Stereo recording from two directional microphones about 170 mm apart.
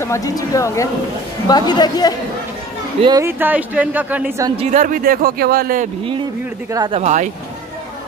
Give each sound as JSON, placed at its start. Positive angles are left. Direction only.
{"t": 0.0, "sound": "speech", "side_deg": 20}
{"t": 3.0, "sound": "speech", "side_deg": -25}
{"t": 3.3, "sound": "speech", "side_deg": -10}
{"t": 4.6, "sound": "speech", "side_deg": -45}
{"t": 6.9, "sound": "speech", "side_deg": -40}